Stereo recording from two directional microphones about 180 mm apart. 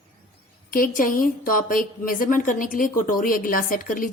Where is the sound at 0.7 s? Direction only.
50° left (ahead or behind).